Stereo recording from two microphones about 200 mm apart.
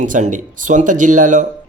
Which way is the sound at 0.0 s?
40° right (ahead or behind).